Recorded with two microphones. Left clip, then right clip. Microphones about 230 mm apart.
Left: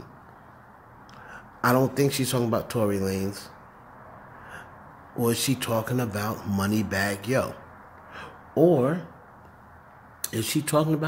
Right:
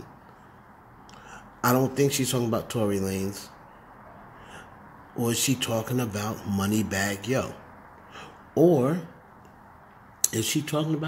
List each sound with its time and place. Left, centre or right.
1.3 s speech: centre
5.1 s speech: centre
8.1 s a sound: centre
10.2 s cutlery: centre
10.5 s speech: centre